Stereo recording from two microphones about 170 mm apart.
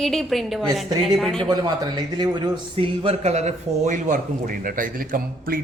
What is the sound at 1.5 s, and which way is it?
Speech, 25° right (ahead or behind).